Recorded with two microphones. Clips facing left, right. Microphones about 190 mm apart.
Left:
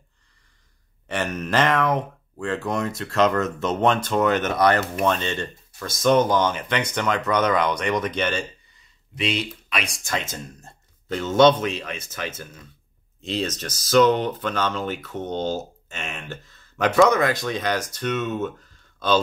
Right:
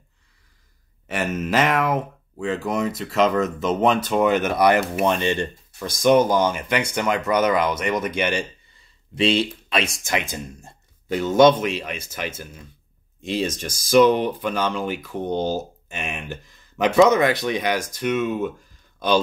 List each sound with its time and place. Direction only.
1.0 s speech: 5° right (ahead or behind)
9.1 s speech: 30° right (ahead or behind)
10.0 s speech: 15° right (ahead or behind)